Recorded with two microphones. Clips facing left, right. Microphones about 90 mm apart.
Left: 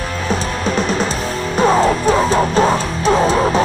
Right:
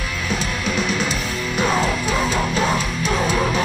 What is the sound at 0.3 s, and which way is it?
Music, 40° left (ahead or behind).